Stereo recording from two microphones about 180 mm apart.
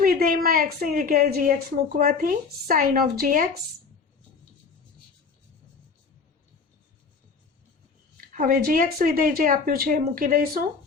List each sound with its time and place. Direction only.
0.0 s a woman's voice: 50° right (ahead or behind)
8.2 s a woman's voice: 50° right (ahead or behind)